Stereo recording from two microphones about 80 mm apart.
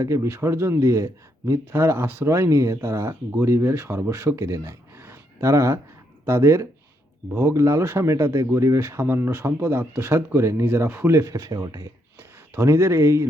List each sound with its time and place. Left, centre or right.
0.0 s a man's voice: right
5.0 s a sound: right
6.2 s a man's voice: right
12.5 s a man's voice: right